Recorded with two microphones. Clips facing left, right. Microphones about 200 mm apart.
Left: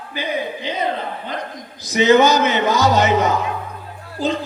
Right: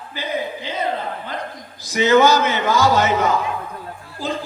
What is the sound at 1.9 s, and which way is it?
A man's voice, 20° left (ahead or behind).